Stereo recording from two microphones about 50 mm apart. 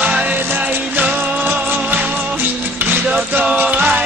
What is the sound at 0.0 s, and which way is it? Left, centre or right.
Music, right.